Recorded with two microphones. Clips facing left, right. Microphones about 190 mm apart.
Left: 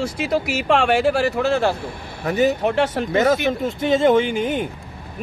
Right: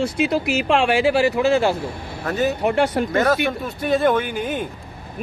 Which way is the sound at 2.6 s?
5° right (ahead or behind).